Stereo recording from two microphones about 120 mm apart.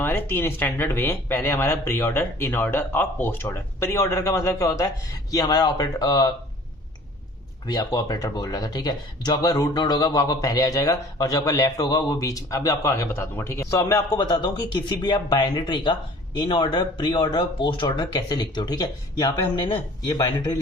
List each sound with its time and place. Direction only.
0.0 s speech: 20° left (ahead or behind)
7.7 s speech: 30° left (ahead or behind)